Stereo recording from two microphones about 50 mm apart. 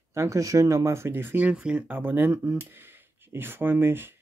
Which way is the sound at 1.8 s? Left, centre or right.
Right.